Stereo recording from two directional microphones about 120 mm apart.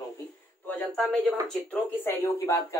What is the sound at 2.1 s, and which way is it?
Speech, 25° left (ahead or behind).